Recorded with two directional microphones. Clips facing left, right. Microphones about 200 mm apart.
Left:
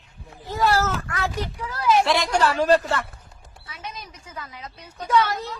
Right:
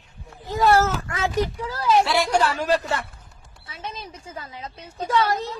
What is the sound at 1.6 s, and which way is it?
Speech, 30° right (ahead or behind).